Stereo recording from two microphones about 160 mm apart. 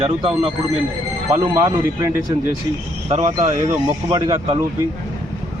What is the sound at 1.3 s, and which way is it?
Speech, 20° right (ahead or behind).